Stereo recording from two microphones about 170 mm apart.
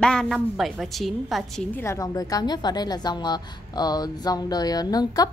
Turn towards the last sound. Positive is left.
turn(degrees=20)  # may be behind; listen again after turning